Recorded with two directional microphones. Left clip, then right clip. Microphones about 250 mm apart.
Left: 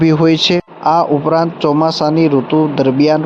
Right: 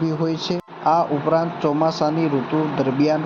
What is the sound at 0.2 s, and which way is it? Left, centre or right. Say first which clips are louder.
Speech: left 12 dB; left.